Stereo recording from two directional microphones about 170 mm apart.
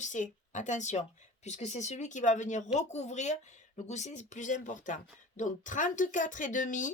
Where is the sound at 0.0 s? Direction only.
45° left (ahead or behind).